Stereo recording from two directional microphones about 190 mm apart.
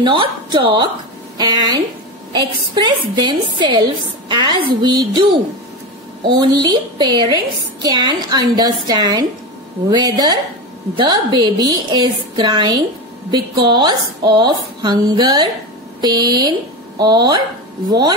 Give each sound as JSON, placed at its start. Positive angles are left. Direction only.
{"t": 0.0, "sound": "a woman's voice", "side_deg": -25}
{"t": 6.2, "sound": "a woman's voice", "side_deg": -25}